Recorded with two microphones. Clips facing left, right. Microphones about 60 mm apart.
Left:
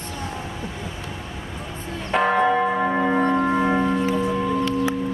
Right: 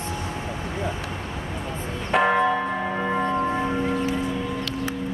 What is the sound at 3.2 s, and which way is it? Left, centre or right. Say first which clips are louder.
Music: left 4 dB; left.